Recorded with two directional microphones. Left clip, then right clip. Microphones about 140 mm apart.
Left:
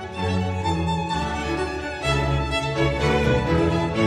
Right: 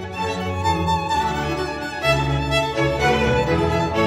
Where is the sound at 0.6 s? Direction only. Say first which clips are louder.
Right 7 dB; 45° right (ahead or behind).